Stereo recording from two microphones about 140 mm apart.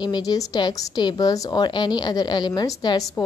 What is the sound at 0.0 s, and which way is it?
A woman's voice, 30° left (ahead or behind).